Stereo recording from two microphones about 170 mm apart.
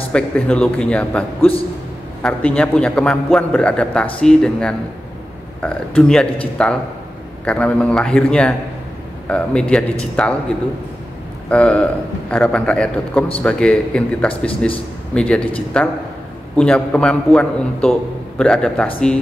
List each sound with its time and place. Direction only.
0.1 s a man's voice: 5° left (ahead or behind)
11.4 s a man's voice: 5° left (ahead or behind)